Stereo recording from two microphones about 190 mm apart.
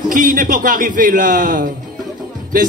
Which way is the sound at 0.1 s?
45° right (ahead or behind).